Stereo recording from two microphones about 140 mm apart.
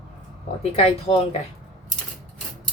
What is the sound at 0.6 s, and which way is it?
Speech, 45° left (ahead or behind).